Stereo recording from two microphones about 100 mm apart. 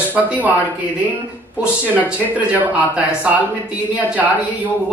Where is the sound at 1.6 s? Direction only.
15° right (ahead or behind).